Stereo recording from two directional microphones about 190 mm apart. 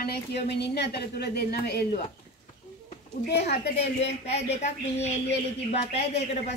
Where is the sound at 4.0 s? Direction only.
35° left (ahead or behind).